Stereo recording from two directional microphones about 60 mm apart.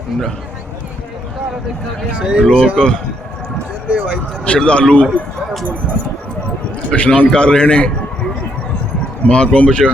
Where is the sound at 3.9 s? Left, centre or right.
Centre.